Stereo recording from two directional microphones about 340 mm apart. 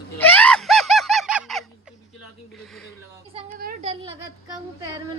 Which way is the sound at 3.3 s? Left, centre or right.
Right.